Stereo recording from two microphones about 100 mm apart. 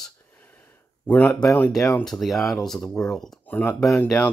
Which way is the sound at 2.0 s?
5° left (ahead or behind).